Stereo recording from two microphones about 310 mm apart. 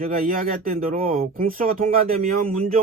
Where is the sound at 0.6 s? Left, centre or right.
Right.